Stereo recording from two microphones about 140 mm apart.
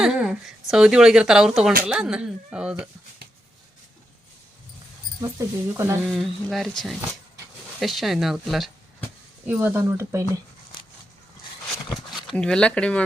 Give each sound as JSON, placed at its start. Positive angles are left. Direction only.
{"t": 0.0, "sound": "speech", "side_deg": -5}
{"t": 5.4, "sound": "speech", "side_deg": -20}
{"t": 6.1, "sound": "speech", "side_deg": 0}
{"t": 9.5, "sound": "speech", "side_deg": -10}
{"t": 12.1, "sound": "speech", "side_deg": 0}